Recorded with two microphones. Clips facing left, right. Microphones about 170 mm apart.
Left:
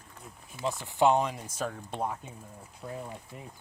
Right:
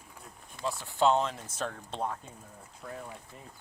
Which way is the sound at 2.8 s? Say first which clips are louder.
Left 3 dB; 20° left (ahead or behind).